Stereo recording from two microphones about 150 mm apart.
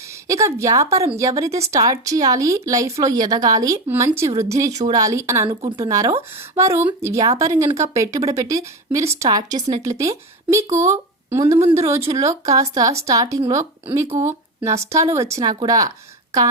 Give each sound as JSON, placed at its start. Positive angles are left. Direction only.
{"t": 0.3, "sound": "speech", "side_deg": -20}